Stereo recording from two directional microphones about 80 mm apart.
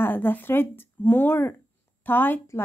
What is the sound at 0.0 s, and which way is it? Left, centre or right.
Speech, left.